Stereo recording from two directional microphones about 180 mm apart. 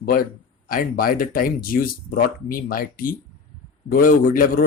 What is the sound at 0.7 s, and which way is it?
Speech, 55° left (ahead or behind).